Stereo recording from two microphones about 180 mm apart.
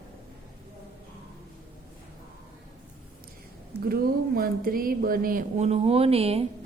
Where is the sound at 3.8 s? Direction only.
55° right (ahead or behind).